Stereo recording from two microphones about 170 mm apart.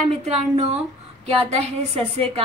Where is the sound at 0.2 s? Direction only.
40° right (ahead or behind).